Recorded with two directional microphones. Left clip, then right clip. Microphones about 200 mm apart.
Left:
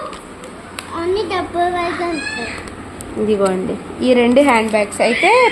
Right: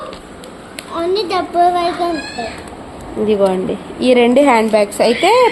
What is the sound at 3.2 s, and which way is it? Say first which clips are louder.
A woman's voice: right 3 dB; centre (ahead or behind).